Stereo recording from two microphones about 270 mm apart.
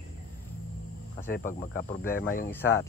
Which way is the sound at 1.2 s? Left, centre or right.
Left.